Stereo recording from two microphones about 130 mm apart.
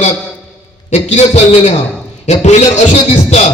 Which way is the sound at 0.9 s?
60° left (ahead or behind).